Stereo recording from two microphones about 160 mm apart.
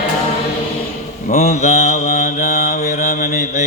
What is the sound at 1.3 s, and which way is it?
Mantra, 45° left (ahead or behind).